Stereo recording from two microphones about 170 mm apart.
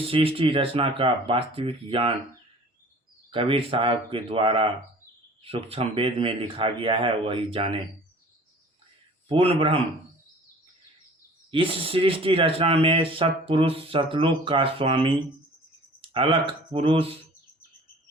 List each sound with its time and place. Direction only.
0.0 s speech: 30° right (ahead or behind)
3.3 s speech: 30° right (ahead or behind)
9.3 s speech: 35° right (ahead or behind)
11.5 s speech: 30° right (ahead or behind)